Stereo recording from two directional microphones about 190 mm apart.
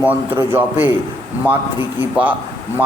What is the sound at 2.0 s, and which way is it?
Speech, 10° right (ahead or behind).